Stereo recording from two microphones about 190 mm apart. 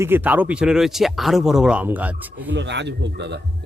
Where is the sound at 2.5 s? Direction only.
65° right (ahead or behind).